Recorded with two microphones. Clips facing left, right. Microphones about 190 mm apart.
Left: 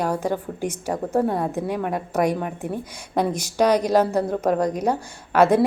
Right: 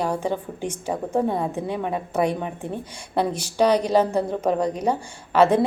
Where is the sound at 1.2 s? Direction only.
10° right (ahead or behind).